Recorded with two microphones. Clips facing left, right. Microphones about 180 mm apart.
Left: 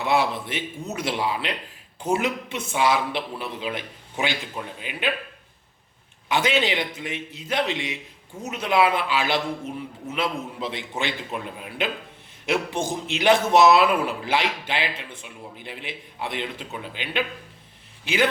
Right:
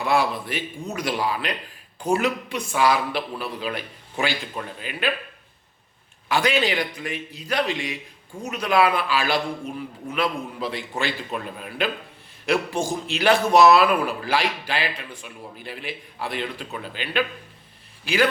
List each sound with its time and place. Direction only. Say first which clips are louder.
0.0 s a man's voice: even; 20° left (ahead or behind)
6.2 s a man's voice: right 1 dB; 20° left (ahead or behind)